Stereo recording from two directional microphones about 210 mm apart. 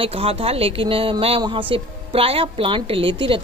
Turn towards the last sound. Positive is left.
turn(degrees=-25)  # may be behind; listen again after turning